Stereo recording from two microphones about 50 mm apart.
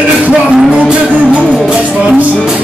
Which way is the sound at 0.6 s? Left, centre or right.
Centre.